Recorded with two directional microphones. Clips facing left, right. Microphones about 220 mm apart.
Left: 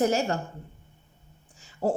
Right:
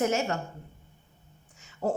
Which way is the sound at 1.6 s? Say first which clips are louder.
Left 3 dB; 30° left (ahead or behind).